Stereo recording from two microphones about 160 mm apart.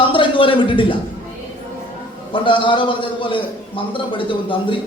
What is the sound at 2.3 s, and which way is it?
A man's voice, 30° left (ahead or behind).